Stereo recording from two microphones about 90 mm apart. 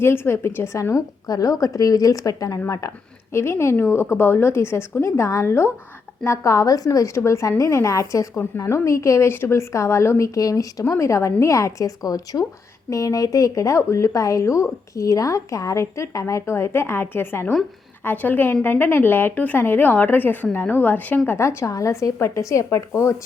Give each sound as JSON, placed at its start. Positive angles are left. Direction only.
{"t": 0.0, "sound": "a woman's voice", "side_deg": 25}
{"t": 3.3, "sound": "a woman's voice", "side_deg": 30}
{"t": 21.2, "sound": "a woman's voice", "side_deg": 30}